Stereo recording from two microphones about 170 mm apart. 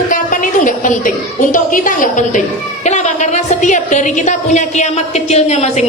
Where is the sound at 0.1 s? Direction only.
50° left (ahead or behind).